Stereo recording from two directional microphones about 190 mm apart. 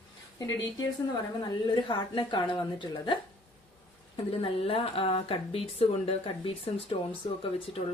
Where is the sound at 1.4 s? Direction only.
25° left (ahead or behind).